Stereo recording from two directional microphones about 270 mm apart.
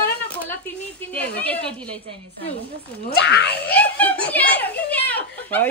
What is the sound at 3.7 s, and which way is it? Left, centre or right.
Speech, centre.